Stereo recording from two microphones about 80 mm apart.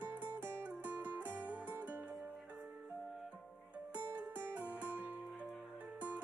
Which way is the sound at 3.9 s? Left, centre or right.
Centre.